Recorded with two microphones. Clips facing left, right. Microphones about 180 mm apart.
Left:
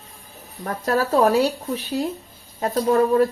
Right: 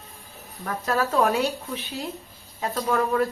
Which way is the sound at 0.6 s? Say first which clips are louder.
Left 3 dB; 40° left (ahead or behind).